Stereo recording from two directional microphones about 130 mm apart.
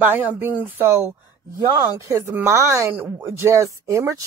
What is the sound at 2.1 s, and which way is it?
A woman's voice, 20° right (ahead or behind).